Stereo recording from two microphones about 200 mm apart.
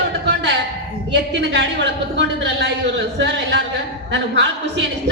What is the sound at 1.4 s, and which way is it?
A woman's voice, 60° right (ahead or behind).